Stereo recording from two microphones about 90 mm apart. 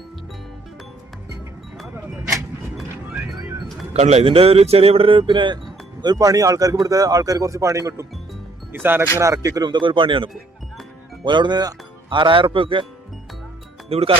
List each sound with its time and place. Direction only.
3.1 s music: 5° right (ahead or behind)
4.3 s speech: 90° right; by 5.5 s 65° right (ahead or behind)
6.0 s speech: 45° right (ahead or behind)
8.7 s speech: 25° right (ahead or behind)
9.2 s speech: 35° right (ahead or behind)
9.6 s speech: 60° right (ahead or behind)
12.0 s a man's voice: 65° right (ahead or behind)
13.9 s speech: 90° right